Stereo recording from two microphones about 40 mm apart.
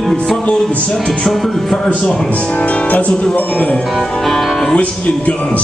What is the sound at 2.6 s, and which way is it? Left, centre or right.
Speech, left.